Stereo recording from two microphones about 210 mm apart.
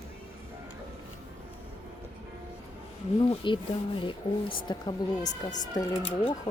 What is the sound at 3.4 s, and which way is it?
Speech, 25° left (ahead or behind).